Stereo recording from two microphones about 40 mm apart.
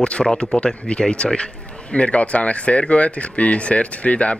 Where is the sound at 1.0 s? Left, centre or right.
Left.